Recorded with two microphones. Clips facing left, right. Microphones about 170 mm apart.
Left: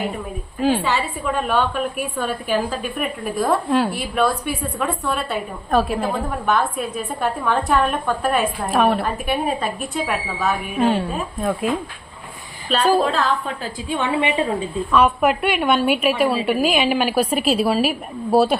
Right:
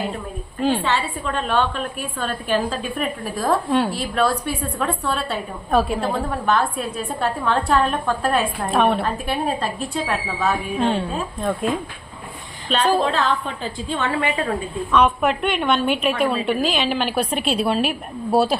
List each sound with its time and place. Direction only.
0.6 s a woman's voice: 5° left (ahead or behind)
13.8 s a woman's voice: 15° left (ahead or behind)
14.9 s a woman's voice: 5° left (ahead or behind)